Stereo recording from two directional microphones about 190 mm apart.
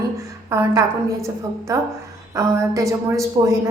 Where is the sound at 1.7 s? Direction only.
15° right (ahead or behind).